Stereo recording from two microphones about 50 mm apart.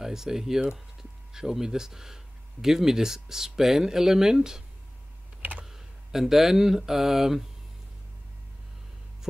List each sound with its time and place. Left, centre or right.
0.0 s speech: centre
5.4 s computer keyboard: right
5.7 s speech: centre